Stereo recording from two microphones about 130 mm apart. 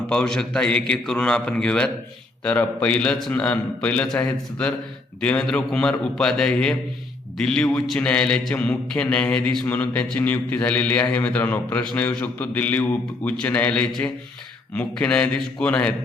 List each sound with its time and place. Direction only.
0.1 s a man's voice: 5° left (ahead or behind)